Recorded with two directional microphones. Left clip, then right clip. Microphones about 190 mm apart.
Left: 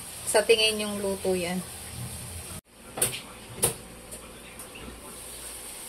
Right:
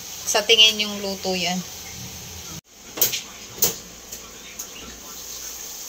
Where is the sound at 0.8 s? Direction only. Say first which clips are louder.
Right 4 dB; 10° left (ahead or behind).